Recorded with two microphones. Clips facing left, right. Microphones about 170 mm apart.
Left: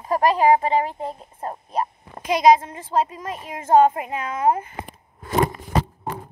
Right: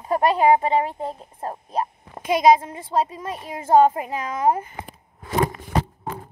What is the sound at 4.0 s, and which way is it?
Speech, 35° right (ahead or behind).